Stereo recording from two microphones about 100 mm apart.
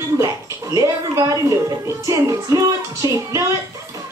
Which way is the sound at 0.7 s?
40° right (ahead or behind).